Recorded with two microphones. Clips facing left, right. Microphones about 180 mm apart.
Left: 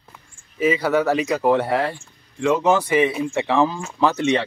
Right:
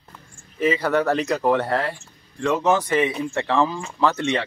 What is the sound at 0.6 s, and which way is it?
Speech, 5° left (ahead or behind).